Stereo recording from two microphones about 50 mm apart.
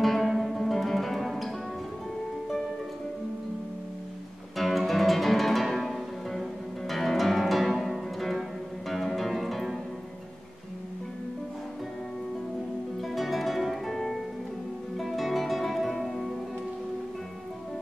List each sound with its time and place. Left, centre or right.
0.0 s music: centre
4.6 s music: centre
13.0 s music: centre